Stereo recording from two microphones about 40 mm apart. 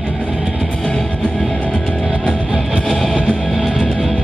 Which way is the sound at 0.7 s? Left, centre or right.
Centre.